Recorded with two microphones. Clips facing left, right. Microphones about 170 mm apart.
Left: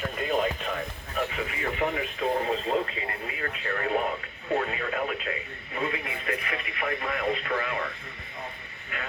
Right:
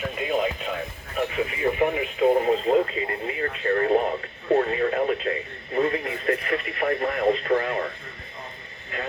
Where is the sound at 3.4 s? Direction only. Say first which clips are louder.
Right 8 dB; 35° right (ahead or behind).